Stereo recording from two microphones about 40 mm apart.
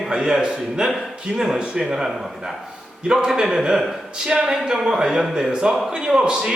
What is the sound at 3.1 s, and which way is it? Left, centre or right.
A man's voice, centre.